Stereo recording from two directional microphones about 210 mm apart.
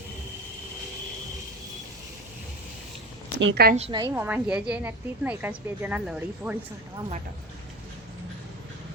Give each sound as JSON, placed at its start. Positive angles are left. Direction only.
{"t": 3.4, "sound": "a woman's voice", "side_deg": -50}
{"t": 3.8, "sound": "a woman's voice", "side_deg": -30}
{"t": 4.0, "sound": "speech", "side_deg": -10}